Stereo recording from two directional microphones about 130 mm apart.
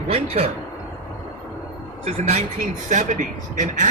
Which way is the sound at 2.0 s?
60° right (ahead or behind).